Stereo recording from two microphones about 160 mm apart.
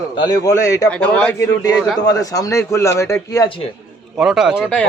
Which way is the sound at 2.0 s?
20° left (ahead or behind).